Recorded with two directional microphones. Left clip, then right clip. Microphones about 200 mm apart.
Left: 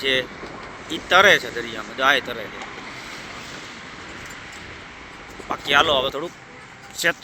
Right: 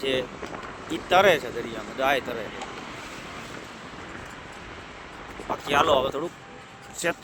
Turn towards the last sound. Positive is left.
turn(degrees=-10)  # may be behind; listen again after turning